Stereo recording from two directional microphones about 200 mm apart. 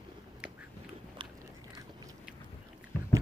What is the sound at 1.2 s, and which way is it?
Biting, 25° right (ahead or behind).